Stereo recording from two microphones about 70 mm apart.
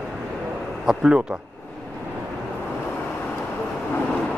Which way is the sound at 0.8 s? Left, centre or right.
Centre.